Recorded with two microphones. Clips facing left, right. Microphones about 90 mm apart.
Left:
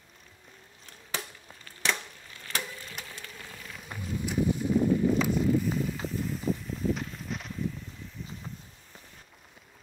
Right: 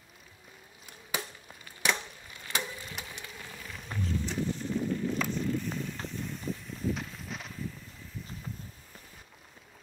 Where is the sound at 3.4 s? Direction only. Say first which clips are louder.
Even; 5° right (ahead or behind).